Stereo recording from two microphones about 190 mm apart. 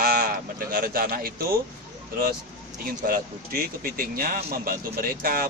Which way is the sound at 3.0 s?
50° right (ahead or behind).